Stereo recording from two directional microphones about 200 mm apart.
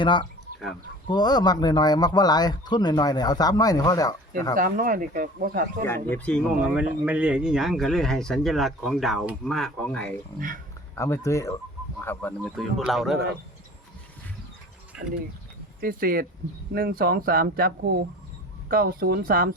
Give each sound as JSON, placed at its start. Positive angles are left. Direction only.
{"t": 0.0, "sound": "speech", "side_deg": 25}
{"t": 4.5, "sound": "speech", "side_deg": -45}
{"t": 5.8, "sound": "speech", "side_deg": 10}
{"t": 6.7, "sound": "speech", "side_deg": -5}
{"t": 10.9, "sound": "speech", "side_deg": 15}
{"t": 14.9, "sound": "pulleys", "side_deg": -5}
{"t": 15.8, "sound": "speech", "side_deg": -45}
{"t": 18.7, "sound": "speech", "side_deg": -50}